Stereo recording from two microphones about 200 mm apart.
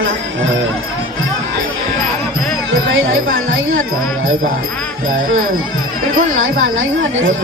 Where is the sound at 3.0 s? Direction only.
80° right.